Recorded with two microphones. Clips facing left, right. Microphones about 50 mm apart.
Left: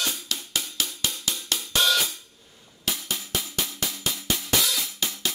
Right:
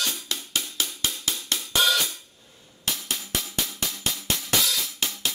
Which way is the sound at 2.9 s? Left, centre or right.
Centre.